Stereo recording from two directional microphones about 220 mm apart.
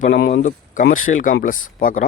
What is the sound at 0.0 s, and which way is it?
Speech, 45° left (ahead or behind).